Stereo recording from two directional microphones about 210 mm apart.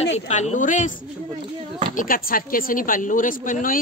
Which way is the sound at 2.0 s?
40° left (ahead or behind).